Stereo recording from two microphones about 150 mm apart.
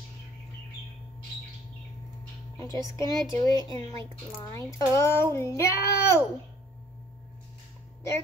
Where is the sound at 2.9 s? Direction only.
25° left (ahead or behind).